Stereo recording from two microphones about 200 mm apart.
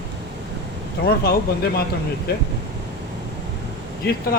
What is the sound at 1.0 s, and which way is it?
Speech, 50° left (ahead or behind).